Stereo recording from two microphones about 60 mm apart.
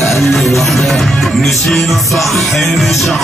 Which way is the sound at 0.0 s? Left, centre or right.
Centre.